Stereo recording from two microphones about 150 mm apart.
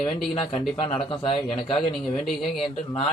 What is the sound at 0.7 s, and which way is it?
Speech, 35° left (ahead or behind).